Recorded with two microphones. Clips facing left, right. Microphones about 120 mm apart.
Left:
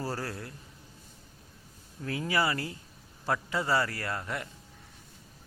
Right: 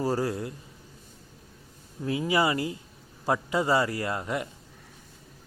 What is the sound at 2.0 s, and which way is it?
Speech, 20° right (ahead or behind).